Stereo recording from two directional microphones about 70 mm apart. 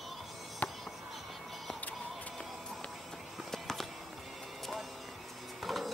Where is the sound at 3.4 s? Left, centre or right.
Centre.